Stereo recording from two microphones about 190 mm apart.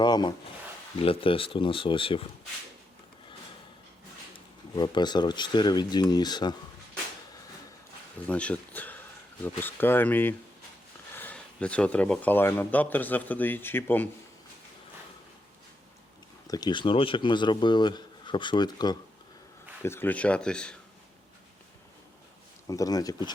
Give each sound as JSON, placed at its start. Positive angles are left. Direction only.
{"t": 0.0, "sound": "speech", "side_deg": 20}
{"t": 4.7, "sound": "speech", "side_deg": 20}
{"t": 8.3, "sound": "speech", "side_deg": 5}
{"t": 16.5, "sound": "speech", "side_deg": 20}
{"t": 19.8, "sound": "speech", "side_deg": 10}
{"t": 22.6, "sound": "speech", "side_deg": 20}